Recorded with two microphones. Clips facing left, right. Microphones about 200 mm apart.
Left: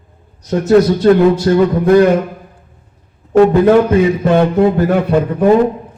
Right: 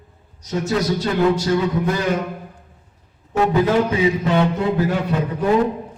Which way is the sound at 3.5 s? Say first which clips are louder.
Left 8 dB; 55° left (ahead or behind).